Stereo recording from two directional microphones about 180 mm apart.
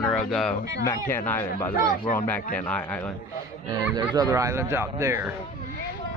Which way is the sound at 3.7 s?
20° right (ahead or behind).